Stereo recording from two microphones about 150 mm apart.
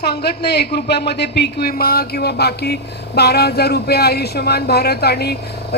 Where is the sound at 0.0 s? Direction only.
90° left.